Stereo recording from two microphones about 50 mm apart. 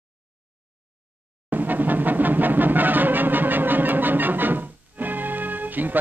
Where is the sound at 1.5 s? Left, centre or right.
Right.